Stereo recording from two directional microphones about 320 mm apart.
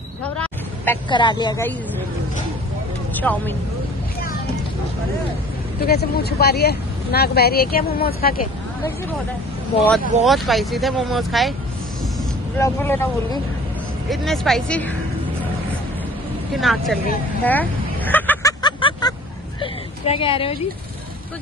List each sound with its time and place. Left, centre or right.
0.2 s a sound: centre
3.2 s speech: centre
5.8 s speech: left
10.2 s speech: centre
12.5 s speech: centre
16.5 s speech: centre
17.5 s vehicle: centre
19.6 s a sound: centre